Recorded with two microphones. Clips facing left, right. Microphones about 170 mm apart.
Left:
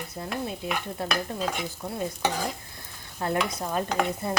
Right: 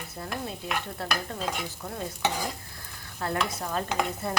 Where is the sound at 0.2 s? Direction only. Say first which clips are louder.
Left 3 dB; 15° left (ahead or behind).